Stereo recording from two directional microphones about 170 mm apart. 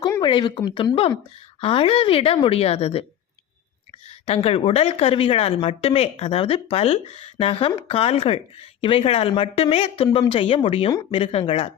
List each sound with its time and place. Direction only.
0.0 s speech: 25° left (ahead or behind)
4.3 s speech: 35° left (ahead or behind)